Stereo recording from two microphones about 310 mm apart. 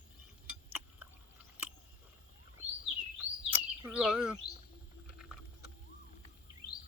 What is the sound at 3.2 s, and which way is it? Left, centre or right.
Bird, centre.